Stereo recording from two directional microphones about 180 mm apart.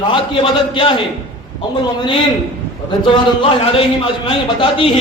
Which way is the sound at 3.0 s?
25° left (ahead or behind).